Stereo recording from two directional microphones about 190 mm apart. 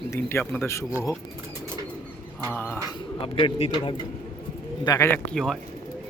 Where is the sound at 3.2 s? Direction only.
30° left (ahead or behind).